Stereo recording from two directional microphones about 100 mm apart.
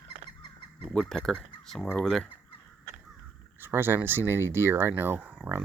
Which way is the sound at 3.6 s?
20° right (ahead or behind).